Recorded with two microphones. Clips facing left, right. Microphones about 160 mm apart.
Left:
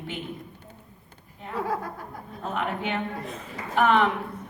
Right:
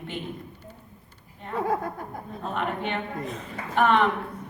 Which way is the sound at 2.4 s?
Centre (ahead or behind).